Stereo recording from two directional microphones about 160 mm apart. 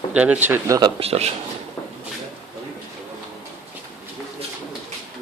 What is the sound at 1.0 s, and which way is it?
Speech, 40° right (ahead or behind).